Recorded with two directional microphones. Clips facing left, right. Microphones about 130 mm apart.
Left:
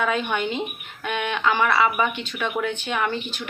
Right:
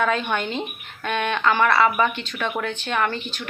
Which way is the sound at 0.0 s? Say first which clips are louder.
Right 1 dB; 10° left (ahead or behind).